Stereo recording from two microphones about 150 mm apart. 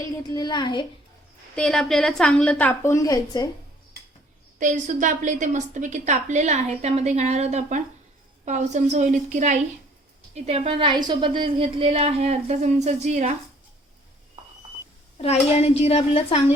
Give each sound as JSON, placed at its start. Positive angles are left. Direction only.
{"t": 0.3, "sound": "a child's voice", "side_deg": 25}
{"t": 1.5, "sound": "a woman's voice", "side_deg": 5}
{"t": 4.6, "sound": "a woman's voice", "side_deg": -60}
{"t": 15.2, "sound": "a woman's voice", "side_deg": 45}